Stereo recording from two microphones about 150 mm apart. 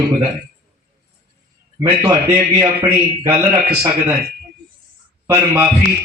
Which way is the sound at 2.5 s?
20° right (ahead or behind).